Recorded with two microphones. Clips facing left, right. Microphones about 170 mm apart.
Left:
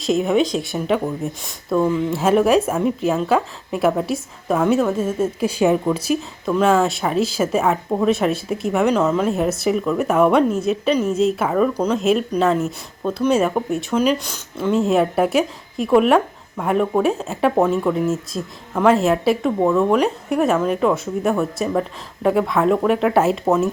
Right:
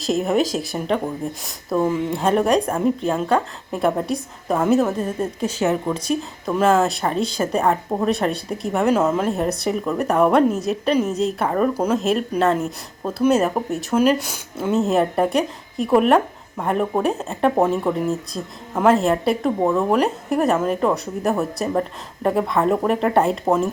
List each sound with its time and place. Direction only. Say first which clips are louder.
0.0 s a woman's voice: left 2 dB; centre (ahead or behind)
1.8 s speech: left 1 dB; 15° right (ahead or behind)
2.1 s a woman's voice: left 3 dB; 5° left (ahead or behind)